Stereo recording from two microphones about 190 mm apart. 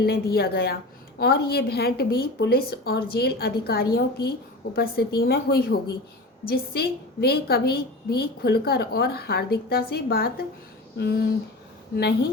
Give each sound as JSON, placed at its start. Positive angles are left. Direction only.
{"t": 0.0, "sound": "a woman's voice", "side_deg": 55}